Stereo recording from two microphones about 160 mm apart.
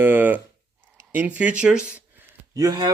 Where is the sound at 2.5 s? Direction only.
25° right (ahead or behind).